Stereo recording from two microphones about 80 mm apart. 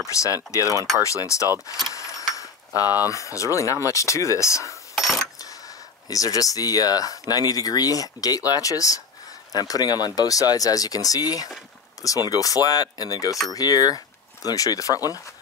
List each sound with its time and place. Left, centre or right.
0.1 s speech: left
2.3 s a sound: left
3.1 s speech: left
4.9 s mechanisms: centre
6.0 s speech: left